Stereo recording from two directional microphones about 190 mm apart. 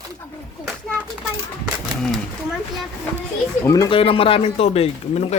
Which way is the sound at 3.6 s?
20° left (ahead or behind).